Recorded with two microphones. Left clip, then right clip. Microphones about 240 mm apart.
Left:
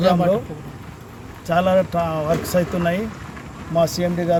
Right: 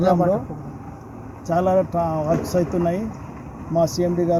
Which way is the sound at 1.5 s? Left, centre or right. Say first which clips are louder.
Left 2 dB; centre.